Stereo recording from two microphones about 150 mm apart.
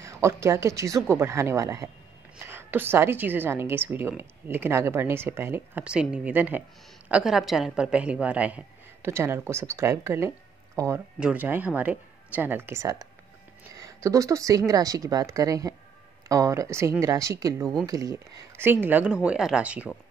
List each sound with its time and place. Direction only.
0.0 s a woman's voice: 20° right (ahead or behind)